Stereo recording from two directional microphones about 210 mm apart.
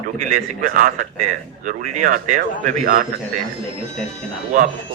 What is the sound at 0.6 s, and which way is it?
A man's voice, 40° right (ahead or behind).